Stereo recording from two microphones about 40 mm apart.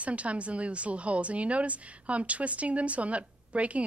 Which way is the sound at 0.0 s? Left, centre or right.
Right.